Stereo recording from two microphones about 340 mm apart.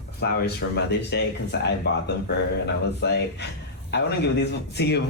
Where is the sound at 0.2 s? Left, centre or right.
Left.